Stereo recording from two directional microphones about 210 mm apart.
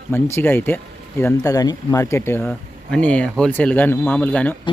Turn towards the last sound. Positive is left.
turn(degrees=5)  # may be behind; listen again after turning